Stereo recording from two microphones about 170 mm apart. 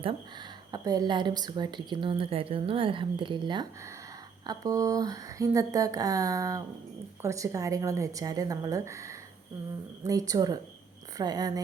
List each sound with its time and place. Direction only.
0.7 s a woman's voice: 25° right (ahead or behind)